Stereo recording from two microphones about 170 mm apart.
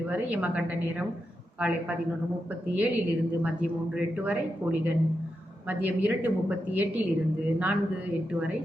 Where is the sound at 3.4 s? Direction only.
10° right (ahead or behind).